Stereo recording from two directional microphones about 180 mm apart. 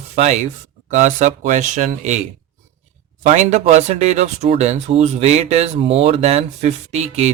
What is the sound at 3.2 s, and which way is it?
Speech, 40° right (ahead or behind).